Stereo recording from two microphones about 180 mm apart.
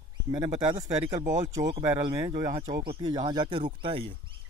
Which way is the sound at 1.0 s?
45° right (ahead or behind).